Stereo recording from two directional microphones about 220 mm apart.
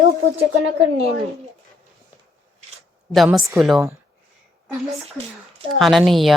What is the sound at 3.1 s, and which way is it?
Speech, centre (ahead or behind).